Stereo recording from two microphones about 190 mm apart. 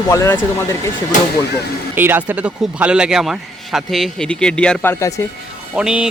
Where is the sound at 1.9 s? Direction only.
10° right (ahead or behind).